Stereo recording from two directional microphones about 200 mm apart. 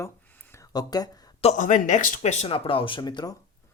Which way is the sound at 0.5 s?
20° left (ahead or behind).